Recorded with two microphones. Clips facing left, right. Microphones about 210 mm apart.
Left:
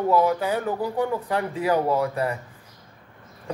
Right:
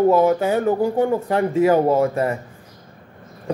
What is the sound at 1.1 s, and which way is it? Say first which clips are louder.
Speech: right 7 dB; 25° right (ahead or behind).